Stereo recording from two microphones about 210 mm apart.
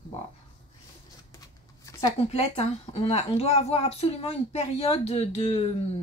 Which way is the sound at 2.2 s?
30° left (ahead or behind).